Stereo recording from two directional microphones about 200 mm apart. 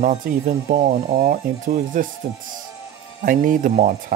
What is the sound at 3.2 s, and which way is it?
Speech, 45° right (ahead or behind).